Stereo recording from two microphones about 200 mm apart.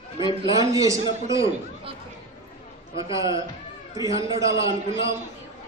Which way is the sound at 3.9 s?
15° right (ahead or behind).